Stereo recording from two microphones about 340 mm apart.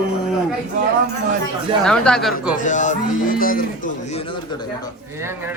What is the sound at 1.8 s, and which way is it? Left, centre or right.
Speech, centre.